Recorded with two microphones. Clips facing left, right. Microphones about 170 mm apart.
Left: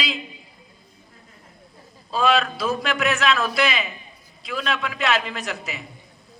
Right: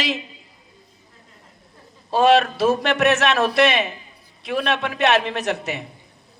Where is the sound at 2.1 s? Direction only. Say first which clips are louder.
Right 5 dB; 70° right (ahead or behind).